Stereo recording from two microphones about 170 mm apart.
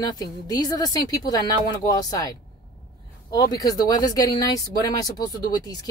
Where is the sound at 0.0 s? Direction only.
25° left (ahead or behind).